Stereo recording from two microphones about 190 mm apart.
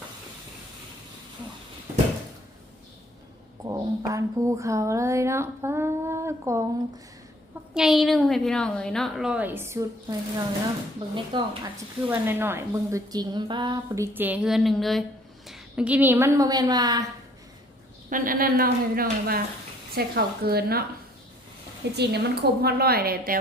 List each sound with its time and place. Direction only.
3.7 s a woman's voice: 15° right (ahead or behind)
7.7 s a woman's voice: centre (ahead or behind); by 11.7 s 25° right (ahead or behind)
12.0 s a woman's voice: 10° right (ahead or behind)
18.1 s a woman's voice: 50° right (ahead or behind)
21.9 s a woman's voice: 60° right (ahead or behind)